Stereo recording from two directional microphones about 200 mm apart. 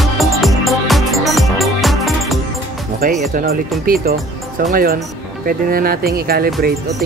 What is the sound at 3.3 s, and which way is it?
Speech, 45° right (ahead or behind).